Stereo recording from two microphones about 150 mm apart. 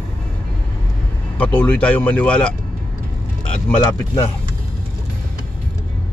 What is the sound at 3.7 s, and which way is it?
Speech, 25° left (ahead or behind).